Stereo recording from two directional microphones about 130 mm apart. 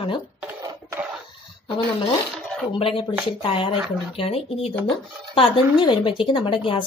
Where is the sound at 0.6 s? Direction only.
25° right (ahead or behind).